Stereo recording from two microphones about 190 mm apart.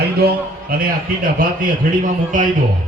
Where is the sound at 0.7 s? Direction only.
50° right (ahead or behind).